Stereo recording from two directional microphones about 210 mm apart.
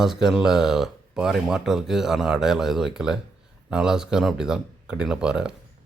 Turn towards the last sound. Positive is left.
turn(degrees=-5)  # may be behind; listen again after turning